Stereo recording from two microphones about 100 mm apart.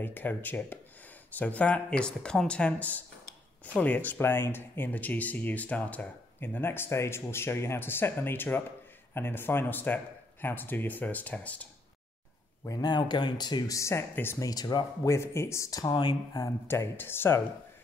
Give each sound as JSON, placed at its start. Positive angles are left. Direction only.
{"t": 0.0, "sound": "speech", "side_deg": 20}
{"t": 12.6, "sound": "speech", "side_deg": 45}
{"t": 13.7, "sound": "speech", "side_deg": 30}
{"t": 14.4, "sound": "speech", "side_deg": 40}
{"t": 15.0, "sound": "speech", "side_deg": 30}
{"t": 15.9, "sound": "speech", "side_deg": 45}
{"t": 16.6, "sound": "speech", "side_deg": 25}